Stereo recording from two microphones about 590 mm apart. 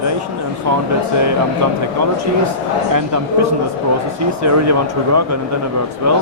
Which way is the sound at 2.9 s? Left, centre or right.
Right.